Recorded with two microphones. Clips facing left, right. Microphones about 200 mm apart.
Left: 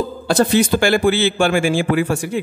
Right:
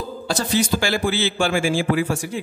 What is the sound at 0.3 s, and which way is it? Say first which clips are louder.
A man's voice: left 6 dB; 55° left (ahead or behind).